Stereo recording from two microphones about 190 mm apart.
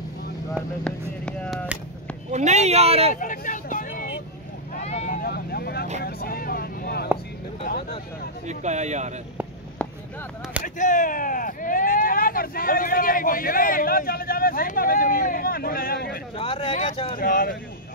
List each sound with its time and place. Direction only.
0.8 s a sound: 5° left (ahead or behind)
2.3 s speech: 35° right (ahead or behind)
3.2 s vehicle: 45° left (ahead or behind)
5.2 s vehicle: 55° left (ahead or behind)
6.0 s speech: 55° left (ahead or behind)
8.5 s speech: 40° right (ahead or behind)
9.8 s a sound: 5° left (ahead or behind)
10.6 s speech: 40° left (ahead or behind)
16.3 s speech: 30° left (ahead or behind)
16.7 s speech: 40° left (ahead or behind)